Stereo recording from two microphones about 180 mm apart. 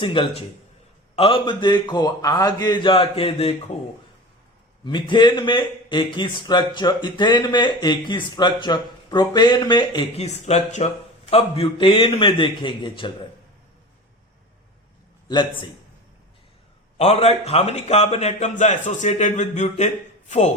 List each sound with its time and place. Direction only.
0.0 s a man's voice: 30° left (ahead or behind)
4.9 s a man's voice: 25° left (ahead or behind)
10.2 s a man's voice: 40° left (ahead or behind)
17.0 s a man's voice: 35° left (ahead or behind)